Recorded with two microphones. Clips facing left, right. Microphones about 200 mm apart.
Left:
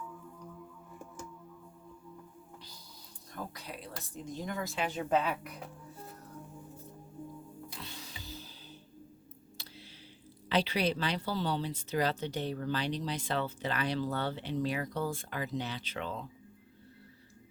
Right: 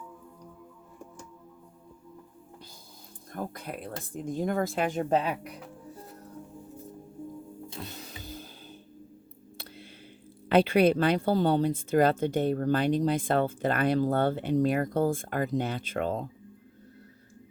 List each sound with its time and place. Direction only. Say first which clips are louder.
3.3 s speech: right 7 dB; 50° right (ahead or behind)
5.0 s speech: right 1 dB; 35° right (ahead or behind)
7.8 s music: right 6 dB; 50° right (ahead or behind)
9.6 s a sound: right 6 dB; 55° right (ahead or behind)
10.5 s speech: right 9 dB; 55° right (ahead or behind)